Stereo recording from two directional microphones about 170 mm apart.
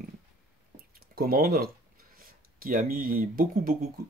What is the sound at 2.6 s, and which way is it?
Speech, 60° right (ahead or behind).